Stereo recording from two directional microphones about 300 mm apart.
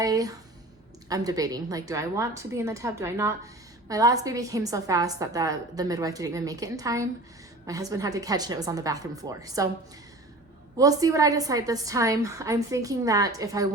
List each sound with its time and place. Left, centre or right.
0.0 s a woman's voice: centre
10.8 s a woman's voice: centre